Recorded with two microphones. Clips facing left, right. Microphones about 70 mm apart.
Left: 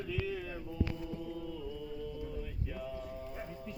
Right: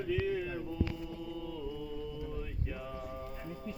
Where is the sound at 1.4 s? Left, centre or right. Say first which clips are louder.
Right 2 dB; right.